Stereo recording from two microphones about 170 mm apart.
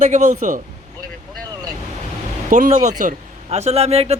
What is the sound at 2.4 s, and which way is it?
A man's voice, 50° right (ahead or behind).